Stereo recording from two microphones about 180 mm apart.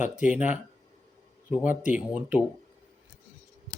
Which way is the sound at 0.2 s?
5° right (ahead or behind).